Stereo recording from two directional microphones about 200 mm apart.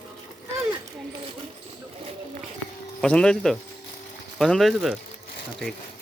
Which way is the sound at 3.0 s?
5° left (ahead or behind).